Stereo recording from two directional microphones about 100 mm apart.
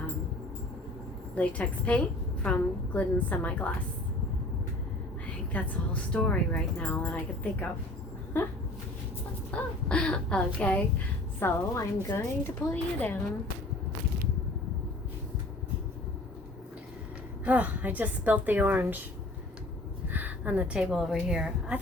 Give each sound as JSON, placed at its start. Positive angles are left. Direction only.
{"t": 1.4, "sound": "a woman's voice", "side_deg": 15}
{"t": 5.5, "sound": "a woman's voice", "side_deg": 15}
{"t": 8.4, "sound": "speech", "side_deg": 20}
{"t": 9.5, "sound": "a sound", "side_deg": 15}
{"t": 11.3, "sound": "speech", "side_deg": 25}
{"t": 17.4, "sound": "a woman's voice", "side_deg": -15}
{"t": 20.1, "sound": "a woman's voice", "side_deg": -15}